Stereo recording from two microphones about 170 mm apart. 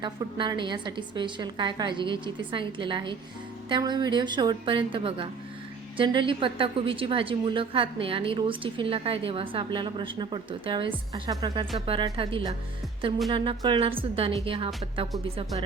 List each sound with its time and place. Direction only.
0.0 s a woman's voice: 25° right (ahead or behind)